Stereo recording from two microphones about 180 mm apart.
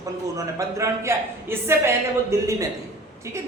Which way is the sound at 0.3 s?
15° right (ahead or behind).